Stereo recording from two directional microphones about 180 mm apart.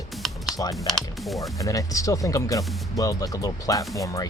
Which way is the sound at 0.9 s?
Centre (ahead or behind).